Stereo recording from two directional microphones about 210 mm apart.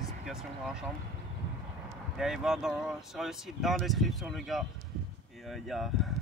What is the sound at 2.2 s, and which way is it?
Speech, centre (ahead or behind).